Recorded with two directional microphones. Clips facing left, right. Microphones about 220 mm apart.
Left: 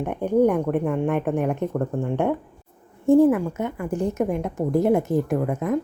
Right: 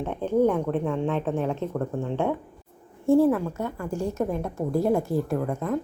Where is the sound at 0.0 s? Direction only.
15° left (ahead or behind).